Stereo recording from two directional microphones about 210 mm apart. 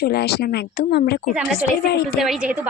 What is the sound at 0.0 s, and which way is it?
Speech, 50° left (ahead or behind).